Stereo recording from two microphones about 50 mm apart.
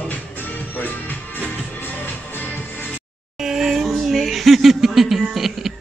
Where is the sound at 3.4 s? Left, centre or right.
Centre.